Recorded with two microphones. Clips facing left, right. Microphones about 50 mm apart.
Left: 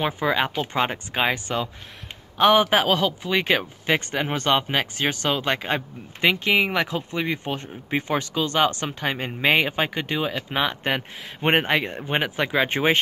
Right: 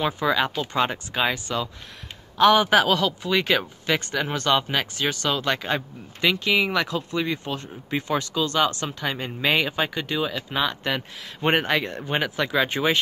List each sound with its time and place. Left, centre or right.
0.0 s speech: left